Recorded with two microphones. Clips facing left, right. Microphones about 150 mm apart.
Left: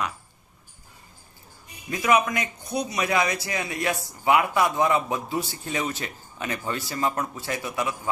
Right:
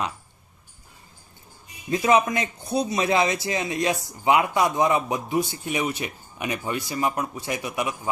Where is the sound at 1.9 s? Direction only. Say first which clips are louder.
Right 2 dB; 30° right (ahead or behind).